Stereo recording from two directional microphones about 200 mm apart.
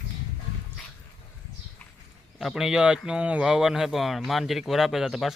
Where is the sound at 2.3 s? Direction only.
Centre (ahead or behind).